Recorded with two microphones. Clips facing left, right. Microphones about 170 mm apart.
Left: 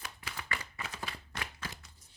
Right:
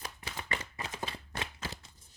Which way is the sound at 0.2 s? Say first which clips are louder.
Right 2 dB; 25° right (ahead or behind).